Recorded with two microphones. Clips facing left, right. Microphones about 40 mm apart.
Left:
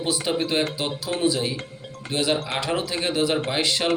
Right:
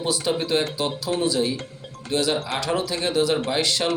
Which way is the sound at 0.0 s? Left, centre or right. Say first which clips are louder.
Even; centre.